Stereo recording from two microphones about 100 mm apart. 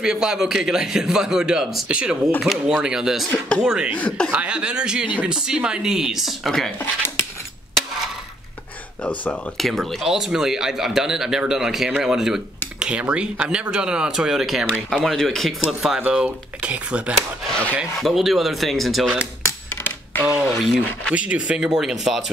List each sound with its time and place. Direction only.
0.0 s speech: 5° right (ahead or behind)
3.9 s speech: 10° left (ahead or behind)
4.3 s speech: 10° right (ahead or behind)
9.0 s speech: 15° left (ahead or behind)
9.6 s speech: centre (ahead or behind)
16.0 s speech: 15° right (ahead or behind)
18.0 s speech: centre (ahead or behind)
19.4 s coin: 20° left (ahead or behind)
20.2 s speech: 5° right (ahead or behind)